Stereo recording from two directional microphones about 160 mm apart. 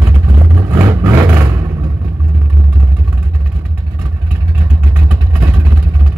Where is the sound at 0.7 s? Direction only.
20° right (ahead or behind).